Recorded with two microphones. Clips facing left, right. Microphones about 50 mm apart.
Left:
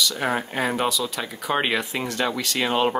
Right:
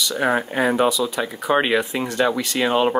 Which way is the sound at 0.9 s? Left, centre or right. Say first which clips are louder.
Right 4 dB; centre.